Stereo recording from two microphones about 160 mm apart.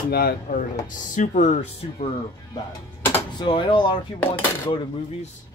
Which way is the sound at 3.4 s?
30° left (ahead or behind).